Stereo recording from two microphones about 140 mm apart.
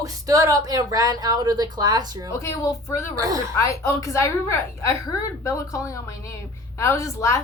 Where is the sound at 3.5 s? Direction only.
20° left (ahead or behind).